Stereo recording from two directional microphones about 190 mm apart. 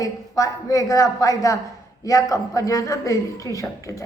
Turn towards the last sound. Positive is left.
turn(degrees=15)  # may be behind; listen again after turning